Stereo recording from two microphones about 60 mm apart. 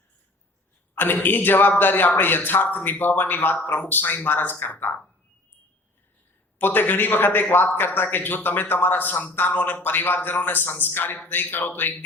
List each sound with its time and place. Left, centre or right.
0.9 s a man's voice: left
6.6 s a man's voice: left